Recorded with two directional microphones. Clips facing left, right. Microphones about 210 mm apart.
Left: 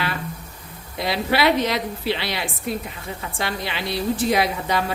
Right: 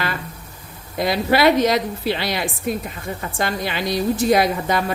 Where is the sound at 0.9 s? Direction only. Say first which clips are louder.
Right 4 dB; 45° right (ahead or behind).